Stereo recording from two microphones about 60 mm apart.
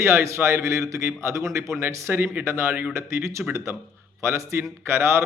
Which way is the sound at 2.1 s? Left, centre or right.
Right.